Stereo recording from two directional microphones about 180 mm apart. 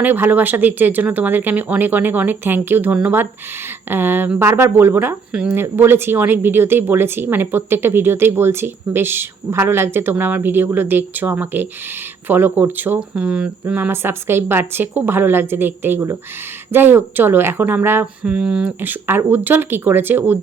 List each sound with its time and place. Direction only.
0.0 s speech: 10° right (ahead or behind)